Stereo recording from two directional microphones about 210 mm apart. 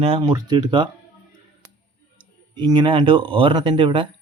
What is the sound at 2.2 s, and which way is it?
Speech, 25° right (ahead or behind).